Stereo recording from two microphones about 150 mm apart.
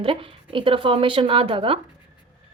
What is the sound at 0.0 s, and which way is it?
A woman's voice, 35° right (ahead or behind).